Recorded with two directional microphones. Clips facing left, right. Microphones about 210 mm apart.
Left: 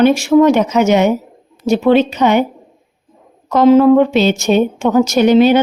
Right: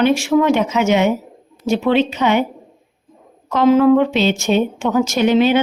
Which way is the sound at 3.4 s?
35° left (ahead or behind).